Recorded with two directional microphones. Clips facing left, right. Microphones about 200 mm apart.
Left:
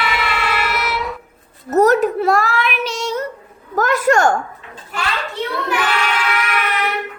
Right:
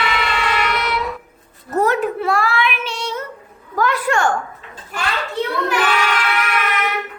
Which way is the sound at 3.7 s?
45° left (ahead or behind).